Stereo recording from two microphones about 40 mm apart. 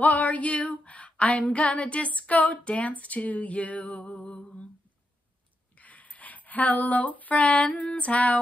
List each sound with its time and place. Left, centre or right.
0.0 s female singing: left
1.5 s music: left
5.8 s speech: left